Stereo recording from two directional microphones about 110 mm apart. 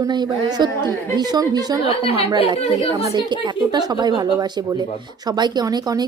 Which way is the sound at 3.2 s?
40° right (ahead or behind).